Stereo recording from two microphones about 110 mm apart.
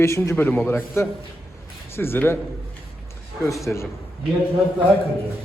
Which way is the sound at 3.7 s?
10° left (ahead or behind).